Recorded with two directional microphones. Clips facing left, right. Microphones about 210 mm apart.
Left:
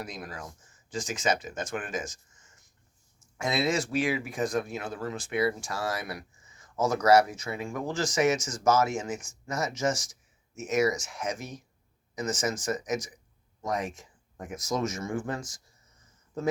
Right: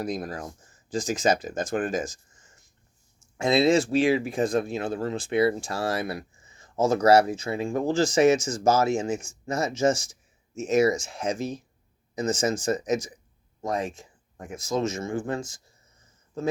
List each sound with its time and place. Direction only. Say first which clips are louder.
0.0 s speech: right 8 dB; 35° right (ahead or behind)